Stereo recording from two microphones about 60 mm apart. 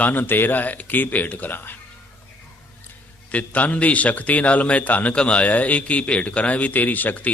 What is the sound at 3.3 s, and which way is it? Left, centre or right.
A man's voice, left.